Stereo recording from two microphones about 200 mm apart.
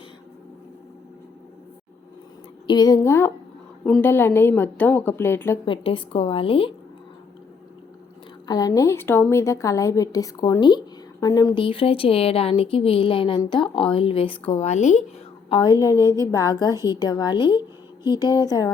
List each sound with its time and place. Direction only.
2.6 s a woman's voice: 20° left (ahead or behind)
5.6 s a woman's voice: 25° left (ahead or behind)
8.4 s a woman's voice: 20° left (ahead or behind); by 15.0 s 35° left (ahead or behind)
15.4 s a woman's voice: 25° left (ahead or behind)
16.0 s a woman's voice: 15° right (ahead or behind)
16.3 s a woman's voice: 20° left (ahead or behind)